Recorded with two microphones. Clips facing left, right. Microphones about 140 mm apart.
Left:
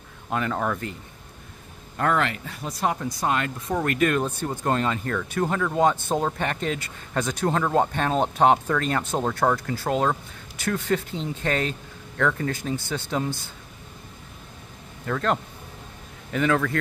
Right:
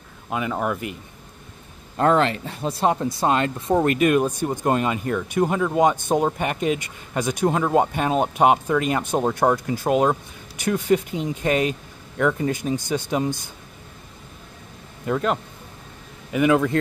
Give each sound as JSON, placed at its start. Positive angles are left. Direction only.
{"t": 0.3, "sound": "speech", "side_deg": -5}
{"t": 2.0, "sound": "speech", "side_deg": -30}
{"t": 15.0, "sound": "speech", "side_deg": -15}